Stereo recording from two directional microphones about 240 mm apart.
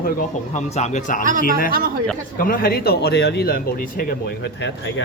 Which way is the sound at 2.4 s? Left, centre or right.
Left.